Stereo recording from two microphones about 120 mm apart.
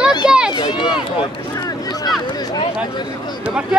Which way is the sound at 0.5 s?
40° left (ahead or behind).